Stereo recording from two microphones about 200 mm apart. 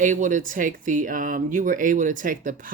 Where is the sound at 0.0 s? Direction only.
40° right (ahead or behind).